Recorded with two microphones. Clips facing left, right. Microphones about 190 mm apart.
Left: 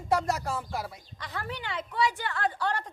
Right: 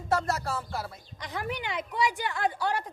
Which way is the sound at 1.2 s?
15° right (ahead or behind).